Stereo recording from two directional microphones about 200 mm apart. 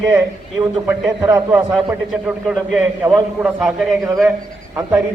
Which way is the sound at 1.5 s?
10° right (ahead or behind).